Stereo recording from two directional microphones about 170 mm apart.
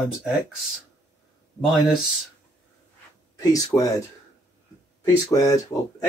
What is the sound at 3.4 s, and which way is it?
Speech, 20° left (ahead or behind).